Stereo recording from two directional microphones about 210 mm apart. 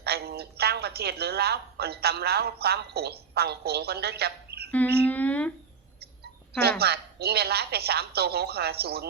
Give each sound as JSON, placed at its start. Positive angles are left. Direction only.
{"t": 0.0, "sound": "a woman's voice", "side_deg": -50}
{"t": 5.0, "sound": "humming", "side_deg": 5}
{"t": 6.7, "sound": "a woman's voice", "side_deg": -50}